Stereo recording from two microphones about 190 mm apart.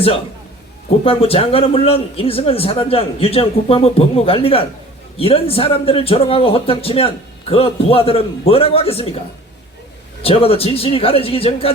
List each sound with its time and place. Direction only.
1.0 s a man's voice: 30° left (ahead or behind)
10.2 s a man's voice: 30° left (ahead or behind)